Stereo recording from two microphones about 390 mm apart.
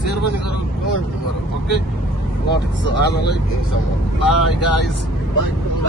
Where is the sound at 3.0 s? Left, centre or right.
Left.